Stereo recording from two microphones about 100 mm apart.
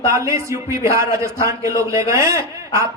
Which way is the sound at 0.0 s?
30° right (ahead or behind).